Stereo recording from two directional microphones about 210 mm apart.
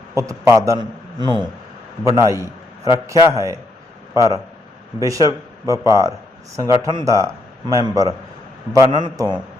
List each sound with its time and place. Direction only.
0.1 s a man's voice: 15° right (ahead or behind)